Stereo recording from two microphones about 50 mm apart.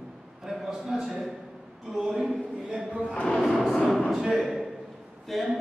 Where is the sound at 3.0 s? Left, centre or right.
Left.